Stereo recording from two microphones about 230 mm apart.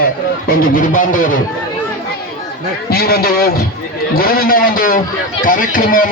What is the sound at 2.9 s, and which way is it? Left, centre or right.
A man's voice, left.